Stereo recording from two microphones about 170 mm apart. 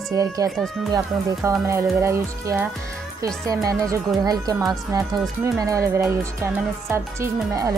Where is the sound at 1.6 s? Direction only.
15° right (ahead or behind).